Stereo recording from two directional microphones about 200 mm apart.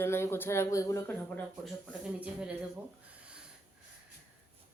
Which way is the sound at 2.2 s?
5° right (ahead or behind).